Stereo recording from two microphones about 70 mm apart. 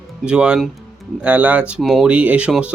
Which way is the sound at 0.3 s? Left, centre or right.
Centre.